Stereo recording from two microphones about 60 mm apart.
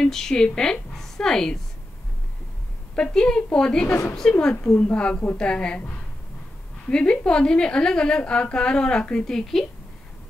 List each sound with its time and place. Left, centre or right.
0.0 s a woman's voice: centre
3.0 s a woman's voice: centre